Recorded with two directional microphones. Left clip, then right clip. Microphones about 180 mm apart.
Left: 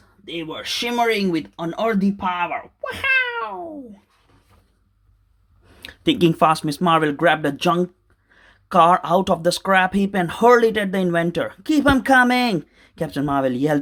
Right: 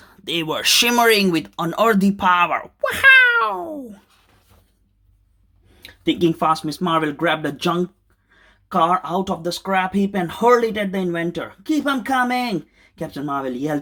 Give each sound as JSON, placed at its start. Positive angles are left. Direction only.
{"t": 0.3, "sound": "speech", "side_deg": -50}
{"t": 5.7, "sound": "speech", "side_deg": 30}
{"t": 8.4, "sound": "speech", "side_deg": 30}
{"t": 11.0, "sound": "speech", "side_deg": 35}